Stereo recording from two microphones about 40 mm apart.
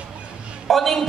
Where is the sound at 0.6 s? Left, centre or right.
Centre.